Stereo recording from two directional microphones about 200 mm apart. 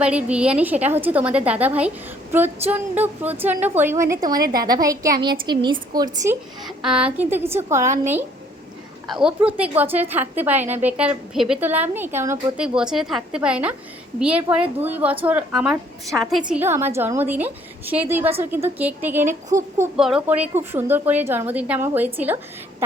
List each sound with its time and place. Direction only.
0.0 s a woman's voice: 5° right (ahead or behind)
6.7 s a woman's voice: 5° right (ahead or behind)
16.5 s a woman's voice: 10° right (ahead or behind)